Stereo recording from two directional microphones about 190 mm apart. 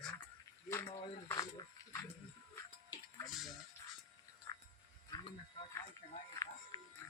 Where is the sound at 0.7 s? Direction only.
15° left (ahead or behind).